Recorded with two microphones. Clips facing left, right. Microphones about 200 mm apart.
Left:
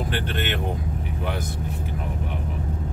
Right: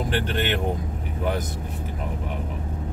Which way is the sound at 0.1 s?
40° right (ahead or behind).